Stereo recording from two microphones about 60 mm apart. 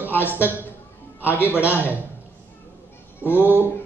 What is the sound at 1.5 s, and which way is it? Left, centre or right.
Speech, right.